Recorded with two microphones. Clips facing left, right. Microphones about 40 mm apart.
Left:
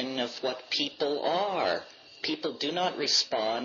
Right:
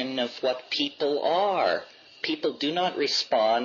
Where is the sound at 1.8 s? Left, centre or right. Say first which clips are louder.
Right 4 dB; right.